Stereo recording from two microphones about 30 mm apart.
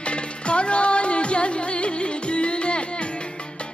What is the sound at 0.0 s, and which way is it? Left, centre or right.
Music, left.